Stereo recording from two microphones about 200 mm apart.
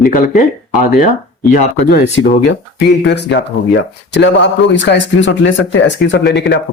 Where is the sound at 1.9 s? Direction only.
60° left (ahead or behind).